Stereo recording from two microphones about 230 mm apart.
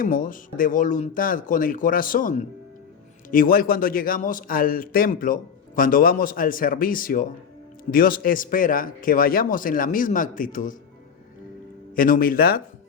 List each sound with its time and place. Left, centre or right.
0.0 s a man's voice: left
11.9 s a man's voice: left